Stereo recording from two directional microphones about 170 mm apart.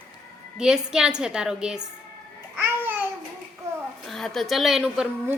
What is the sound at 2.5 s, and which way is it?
Babbling, 10° right (ahead or behind).